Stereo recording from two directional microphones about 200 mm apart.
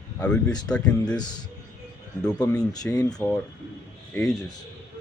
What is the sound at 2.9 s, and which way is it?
Speech, 20° left (ahead or behind).